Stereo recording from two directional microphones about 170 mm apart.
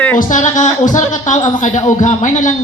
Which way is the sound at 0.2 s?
50° left (ahead or behind).